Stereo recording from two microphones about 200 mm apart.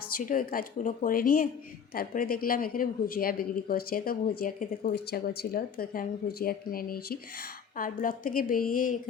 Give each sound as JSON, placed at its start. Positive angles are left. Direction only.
{"t": 0.1, "sound": "speech", "side_deg": 45}